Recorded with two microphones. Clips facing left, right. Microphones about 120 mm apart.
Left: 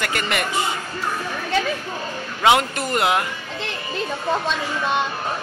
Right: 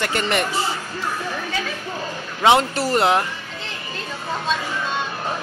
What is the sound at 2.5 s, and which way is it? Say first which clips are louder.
Speech: right 2 dB; 30° right (ahead or behind).